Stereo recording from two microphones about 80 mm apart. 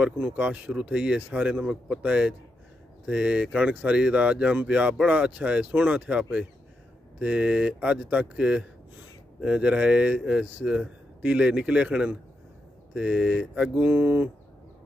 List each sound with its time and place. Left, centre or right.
0.0 s speech: centre